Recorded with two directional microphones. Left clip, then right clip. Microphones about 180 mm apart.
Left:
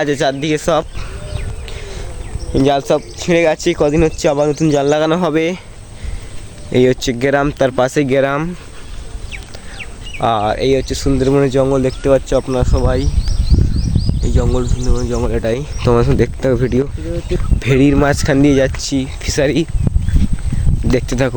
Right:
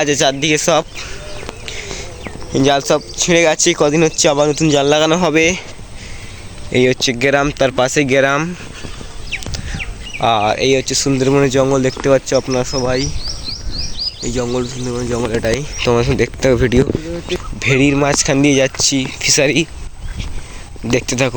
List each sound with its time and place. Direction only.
0.0 s speech: 10° left (ahead or behind)
2.5 s speech: 5° left (ahead or behind)
6.7 s speech: 30° left (ahead or behind)
8.1 s speech: 10° left (ahead or behind)
10.2 s speech: 15° left (ahead or behind); by 13.1 s 10° right (ahead or behind)
14.3 s speech: 5° right (ahead or behind)
15.2 s speech: centre (ahead or behind)
15.8 s speech: 30° left (ahead or behind)
16.4 s speech: 5° right (ahead or behind)
17.6 s speech: 30° left (ahead or behind); by 19.6 s 15° left (ahead or behind)
20.9 s speech: 20° left (ahead or behind)